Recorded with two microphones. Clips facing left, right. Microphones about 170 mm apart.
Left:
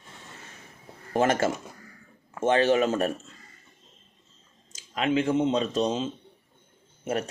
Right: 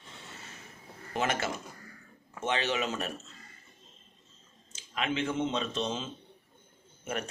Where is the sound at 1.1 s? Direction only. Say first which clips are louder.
Left 8 dB; 45° left (ahead or behind).